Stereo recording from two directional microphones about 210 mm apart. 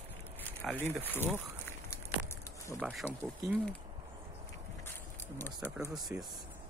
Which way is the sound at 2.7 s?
5° left (ahead or behind).